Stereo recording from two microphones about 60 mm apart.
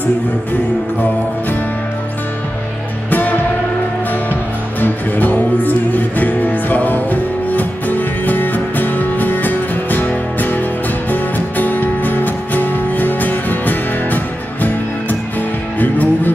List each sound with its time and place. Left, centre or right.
3.1 s music: left